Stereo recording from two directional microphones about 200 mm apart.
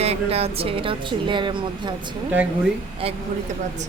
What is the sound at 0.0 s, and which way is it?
A woman's voice, 30° right (ahead or behind).